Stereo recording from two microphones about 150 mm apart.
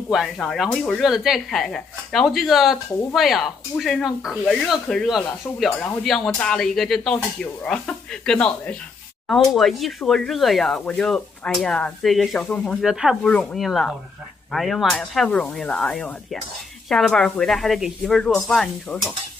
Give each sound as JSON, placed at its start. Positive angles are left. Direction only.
{"t": 0.1, "sound": "speech", "side_deg": 0}